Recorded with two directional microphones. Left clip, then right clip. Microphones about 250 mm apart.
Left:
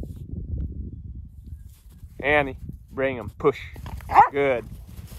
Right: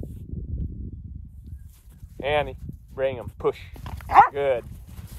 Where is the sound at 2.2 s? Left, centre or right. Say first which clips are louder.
Left 3 dB; left.